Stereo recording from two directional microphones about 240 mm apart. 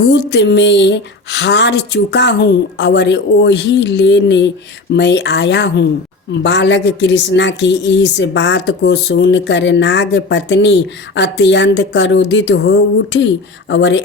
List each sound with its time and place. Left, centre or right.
0.0 s a woman's voice: left